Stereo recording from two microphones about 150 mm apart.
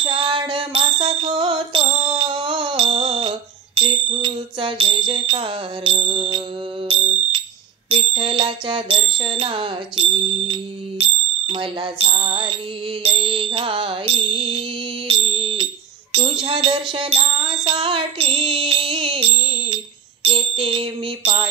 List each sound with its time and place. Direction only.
0.0 s music: 35° right (ahead or behind)
7.9 s bicycle bell: 35° right (ahead or behind)
13.0 s music: 40° right (ahead or behind)
15.0 s a sound: 40° right (ahead or behind)